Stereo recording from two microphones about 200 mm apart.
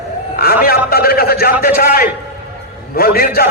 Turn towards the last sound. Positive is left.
turn(degrees=50)  # may be behind; listen again after turning